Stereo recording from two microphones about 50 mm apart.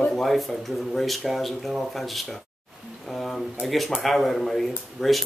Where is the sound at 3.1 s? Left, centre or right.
Centre.